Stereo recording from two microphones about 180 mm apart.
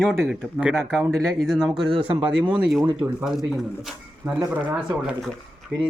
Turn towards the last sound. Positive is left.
turn(degrees=0)  # may be behind; listen again after turning